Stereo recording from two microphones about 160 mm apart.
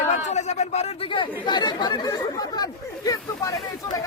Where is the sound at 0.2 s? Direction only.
45° left (ahead or behind).